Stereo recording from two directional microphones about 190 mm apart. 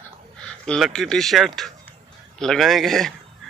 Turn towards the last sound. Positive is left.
turn(degrees=0)  # may be behind; listen again after turning